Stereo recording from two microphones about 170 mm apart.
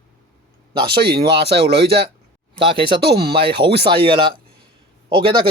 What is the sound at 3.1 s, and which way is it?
Speech, 65° right (ahead or behind).